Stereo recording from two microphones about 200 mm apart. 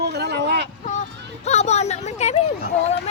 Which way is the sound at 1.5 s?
35° left (ahead or behind).